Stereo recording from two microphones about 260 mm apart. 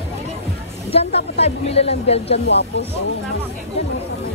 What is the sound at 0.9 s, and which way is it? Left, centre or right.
Speech, left.